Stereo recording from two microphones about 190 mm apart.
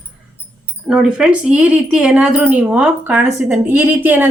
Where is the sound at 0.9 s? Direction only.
5° right (ahead or behind).